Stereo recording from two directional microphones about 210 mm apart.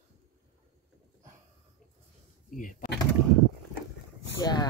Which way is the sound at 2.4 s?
40° left (ahead or behind).